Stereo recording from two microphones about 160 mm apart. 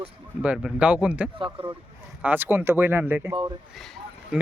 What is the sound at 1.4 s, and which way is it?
Speech, 30° right (ahead or behind).